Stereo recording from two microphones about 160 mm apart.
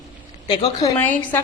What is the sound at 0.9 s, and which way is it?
Speech, 10° left (ahead or behind).